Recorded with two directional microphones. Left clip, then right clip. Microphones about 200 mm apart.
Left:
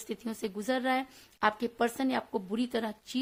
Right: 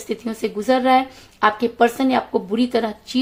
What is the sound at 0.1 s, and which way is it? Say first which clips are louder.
A woman's voice: right 12 dB; 50° left (ahead or behind).